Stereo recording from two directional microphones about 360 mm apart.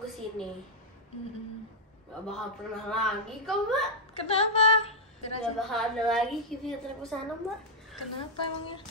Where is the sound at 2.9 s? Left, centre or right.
Centre.